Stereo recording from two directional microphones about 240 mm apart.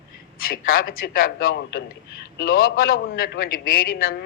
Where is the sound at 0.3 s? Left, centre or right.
Left.